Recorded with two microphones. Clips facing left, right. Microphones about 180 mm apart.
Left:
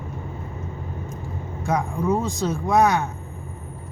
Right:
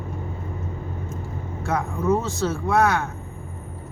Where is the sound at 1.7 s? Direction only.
10° left (ahead or behind).